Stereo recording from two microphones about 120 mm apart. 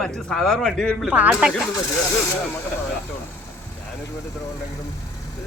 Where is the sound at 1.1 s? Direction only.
10° right (ahead or behind).